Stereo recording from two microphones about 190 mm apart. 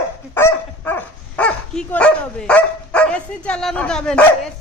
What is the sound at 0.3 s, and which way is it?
Speech, 10° left (ahead or behind).